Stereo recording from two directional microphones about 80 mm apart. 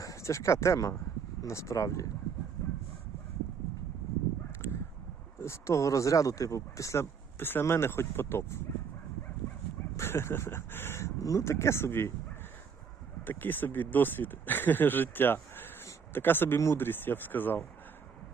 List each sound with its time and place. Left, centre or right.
0.0 s speech: left
4.6 s a sound: left
5.4 s speech: left
10.0 s speech: left
13.2 s speech: left